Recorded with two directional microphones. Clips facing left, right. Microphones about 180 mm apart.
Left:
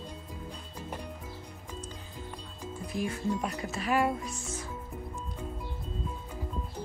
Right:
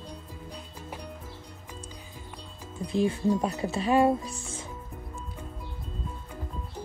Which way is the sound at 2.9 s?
30° right (ahead or behind).